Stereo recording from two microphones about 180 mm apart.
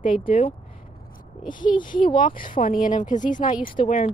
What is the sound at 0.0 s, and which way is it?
Speech, 30° left (ahead or behind).